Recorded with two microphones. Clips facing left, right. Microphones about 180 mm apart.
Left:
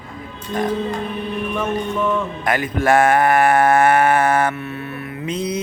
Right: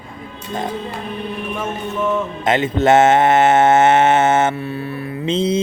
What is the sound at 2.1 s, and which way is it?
Mantra, 25° right (ahead or behind).